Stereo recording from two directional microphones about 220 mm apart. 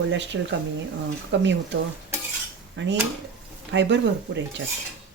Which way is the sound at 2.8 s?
55° right (ahead or behind).